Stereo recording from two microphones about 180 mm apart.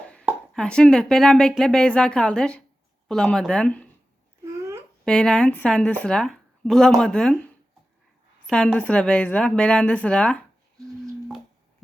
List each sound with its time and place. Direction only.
0.0 s plop: 5° left (ahead or behind)
0.5 s speech: 5° left (ahead or behind)
4.4 s babbling: 15° right (ahead or behind)
5.0 s speech: 5° left (ahead or behind)
8.4 s speech: 5° left (ahead or behind)